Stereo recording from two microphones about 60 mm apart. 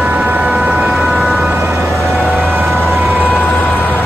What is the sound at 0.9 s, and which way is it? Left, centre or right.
Vehicle, centre.